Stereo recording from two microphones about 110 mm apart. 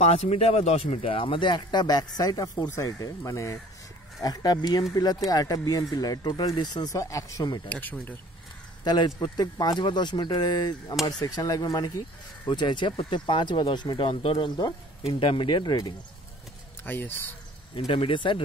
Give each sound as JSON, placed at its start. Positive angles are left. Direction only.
{"t": 0.0, "sound": "speech", "side_deg": 80}
{"t": 7.7, "sound": "speech", "side_deg": 15}
{"t": 8.8, "sound": "speech", "side_deg": 40}
{"t": 16.8, "sound": "speech", "side_deg": 20}
{"t": 17.7, "sound": "speech", "side_deg": 55}